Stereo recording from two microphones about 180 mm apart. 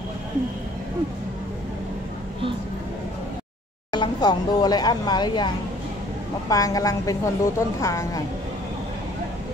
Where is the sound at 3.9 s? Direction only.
25° left (ahead or behind).